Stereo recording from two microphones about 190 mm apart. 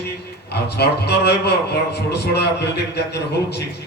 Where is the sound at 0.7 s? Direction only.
60° left (ahead or behind).